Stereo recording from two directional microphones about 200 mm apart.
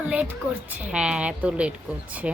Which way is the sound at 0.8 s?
5° right (ahead or behind).